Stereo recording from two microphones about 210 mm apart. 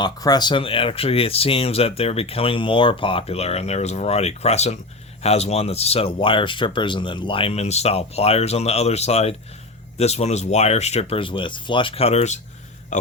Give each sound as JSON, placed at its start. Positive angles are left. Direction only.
{"t": 0.0, "sound": "speech", "side_deg": 20}